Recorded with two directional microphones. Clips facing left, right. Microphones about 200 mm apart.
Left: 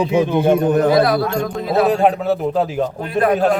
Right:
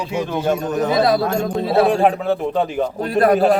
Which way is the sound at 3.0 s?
40° right (ahead or behind).